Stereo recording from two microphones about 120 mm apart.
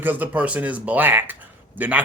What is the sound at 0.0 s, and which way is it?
A man's voice, 15° right (ahead or behind).